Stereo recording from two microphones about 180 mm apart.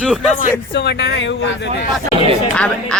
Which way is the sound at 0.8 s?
70° left (ahead or behind).